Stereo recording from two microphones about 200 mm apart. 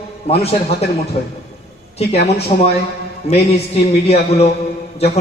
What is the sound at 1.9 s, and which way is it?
A man's voice, 30° left (ahead or behind).